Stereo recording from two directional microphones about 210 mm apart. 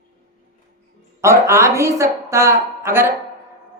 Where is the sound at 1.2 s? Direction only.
15° right (ahead or behind).